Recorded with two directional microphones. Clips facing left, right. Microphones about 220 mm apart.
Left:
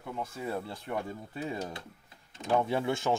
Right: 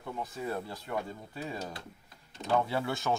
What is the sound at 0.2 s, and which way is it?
Speech, 25° left (ahead or behind).